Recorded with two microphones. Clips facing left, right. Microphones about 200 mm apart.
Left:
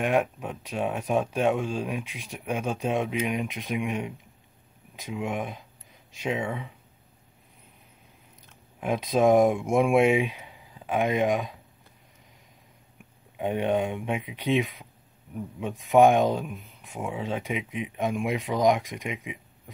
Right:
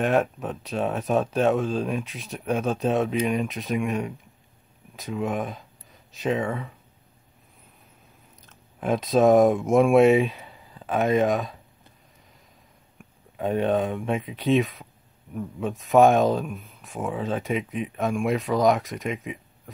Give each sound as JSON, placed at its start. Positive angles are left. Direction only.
{"t": 0.0, "sound": "speech", "side_deg": 15}
{"t": 8.5, "sound": "speech", "side_deg": 15}
{"t": 13.4, "sound": "speech", "side_deg": 15}